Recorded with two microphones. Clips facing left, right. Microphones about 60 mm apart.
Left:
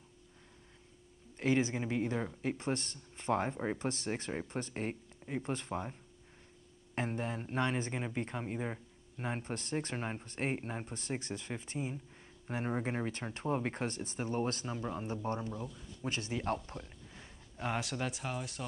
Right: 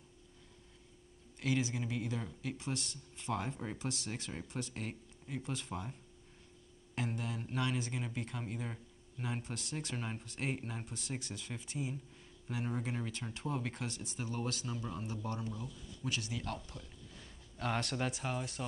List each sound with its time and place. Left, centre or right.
1.4 s speech: left
7.0 s speech: left
17.6 s speech: centre